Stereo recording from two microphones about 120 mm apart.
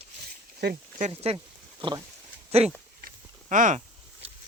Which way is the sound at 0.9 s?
90° right.